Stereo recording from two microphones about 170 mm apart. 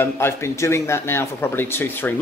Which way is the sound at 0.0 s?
15° left (ahead or behind).